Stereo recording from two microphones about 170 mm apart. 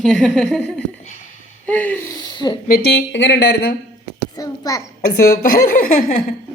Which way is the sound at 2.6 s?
65° left (ahead or behind).